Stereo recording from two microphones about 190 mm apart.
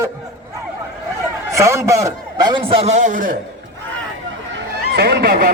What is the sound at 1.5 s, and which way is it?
A man's voice, 15° right (ahead or behind).